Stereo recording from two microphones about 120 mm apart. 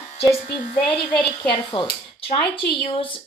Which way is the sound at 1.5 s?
45° left (ahead or behind).